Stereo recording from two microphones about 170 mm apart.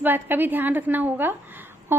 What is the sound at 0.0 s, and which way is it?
A woman's voice, 10° right (ahead or behind).